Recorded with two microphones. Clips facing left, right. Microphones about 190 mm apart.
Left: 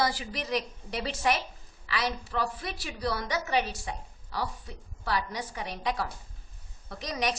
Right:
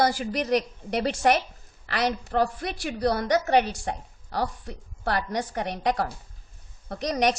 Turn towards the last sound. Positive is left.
turn(degrees=-55)  # may be behind; listen again after turning